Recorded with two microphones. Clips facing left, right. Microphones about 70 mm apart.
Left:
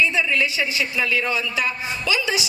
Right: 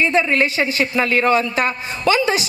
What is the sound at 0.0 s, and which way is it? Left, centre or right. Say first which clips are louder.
A man's voice: right 4 dB; right.